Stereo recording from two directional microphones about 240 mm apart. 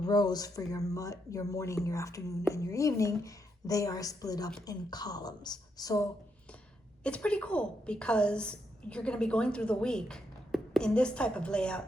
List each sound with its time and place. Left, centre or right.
0.0 s a woman's voice: centre